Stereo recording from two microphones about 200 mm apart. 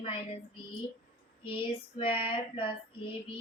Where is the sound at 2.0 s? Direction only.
25° left (ahead or behind).